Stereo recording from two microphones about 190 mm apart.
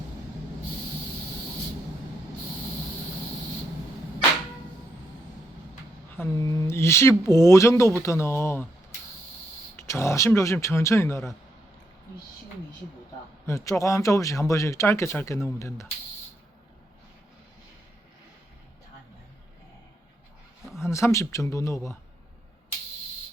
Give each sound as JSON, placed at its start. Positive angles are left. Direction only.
{"t": 6.1, "sound": "speech", "side_deg": 15}
{"t": 9.7, "sound": "speech", "side_deg": 15}
{"t": 13.5, "sound": "speech", "side_deg": 15}
{"t": 20.7, "sound": "speech", "side_deg": 15}